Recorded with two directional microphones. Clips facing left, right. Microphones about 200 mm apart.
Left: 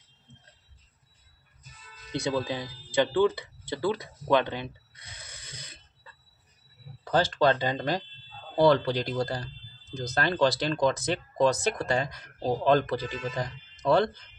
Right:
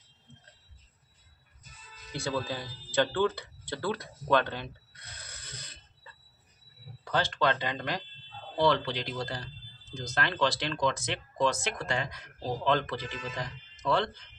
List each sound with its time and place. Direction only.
2.4 s speech: 15° left (ahead or behind)
7.1 s speech: 40° left (ahead or behind)